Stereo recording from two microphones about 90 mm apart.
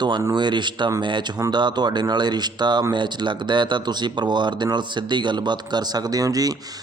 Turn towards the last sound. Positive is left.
turn(degrees=-45)  # may be behind; listen again after turning